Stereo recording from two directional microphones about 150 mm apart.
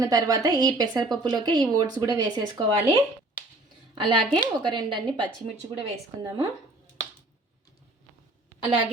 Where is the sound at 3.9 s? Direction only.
30° right (ahead or behind).